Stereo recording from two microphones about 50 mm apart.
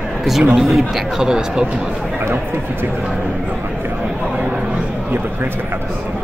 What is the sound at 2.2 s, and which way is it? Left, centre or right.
Speech, right.